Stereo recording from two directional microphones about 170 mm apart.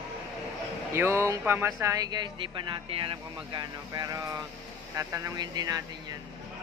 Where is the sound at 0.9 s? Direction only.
15° right (ahead or behind).